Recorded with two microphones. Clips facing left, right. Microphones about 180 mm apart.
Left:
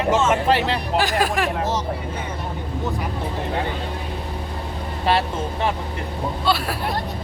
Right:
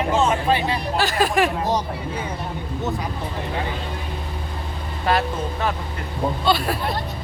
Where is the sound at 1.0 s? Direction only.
15° left (ahead or behind).